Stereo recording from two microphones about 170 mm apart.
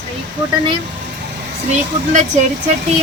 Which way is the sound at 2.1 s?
45° right (ahead or behind).